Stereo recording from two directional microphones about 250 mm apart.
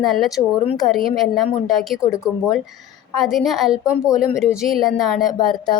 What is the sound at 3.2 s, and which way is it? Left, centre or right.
A woman's voice, centre.